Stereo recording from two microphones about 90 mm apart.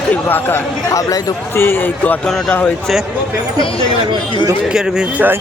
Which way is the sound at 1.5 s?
25° left (ahead or behind).